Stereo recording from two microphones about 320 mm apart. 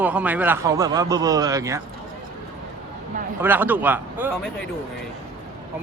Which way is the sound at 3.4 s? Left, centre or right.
Centre.